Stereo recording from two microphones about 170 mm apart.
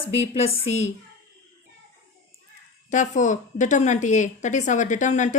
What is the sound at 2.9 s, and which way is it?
A woman's voice, 45° left (ahead or behind).